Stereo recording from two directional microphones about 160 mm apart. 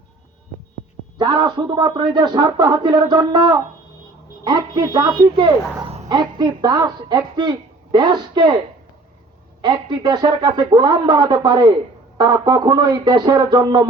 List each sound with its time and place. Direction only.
1.2 s speech: 25° right (ahead or behind)
9.6 s speech: 30° right (ahead or behind)